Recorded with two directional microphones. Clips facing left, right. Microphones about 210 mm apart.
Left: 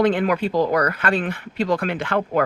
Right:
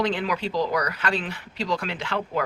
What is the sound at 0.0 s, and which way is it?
Speech, 55° left (ahead or behind).